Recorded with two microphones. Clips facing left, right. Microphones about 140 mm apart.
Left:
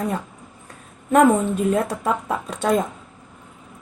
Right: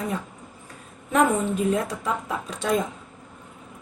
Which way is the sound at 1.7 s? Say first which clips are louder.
Left 4 dB; 55° left (ahead or behind).